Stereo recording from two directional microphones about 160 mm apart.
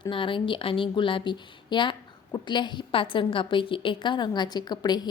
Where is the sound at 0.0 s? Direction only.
30° left (ahead or behind).